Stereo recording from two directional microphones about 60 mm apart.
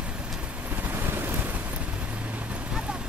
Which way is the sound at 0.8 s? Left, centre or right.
Right.